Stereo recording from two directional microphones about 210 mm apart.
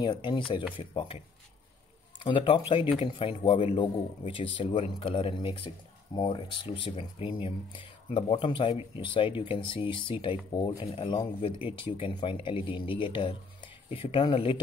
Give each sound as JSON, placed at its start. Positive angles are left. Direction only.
{"t": 0.0, "sound": "speech", "side_deg": 20}
{"t": 10.8, "sound": "speech", "side_deg": 30}